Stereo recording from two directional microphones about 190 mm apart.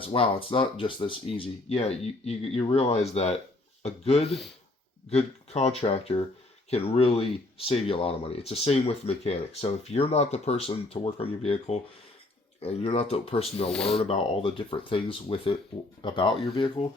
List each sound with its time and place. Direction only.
0.0 s speech: 30° left (ahead or behind)
13.7 s speech: 5° left (ahead or behind)
14.0 s speech: 30° left (ahead or behind)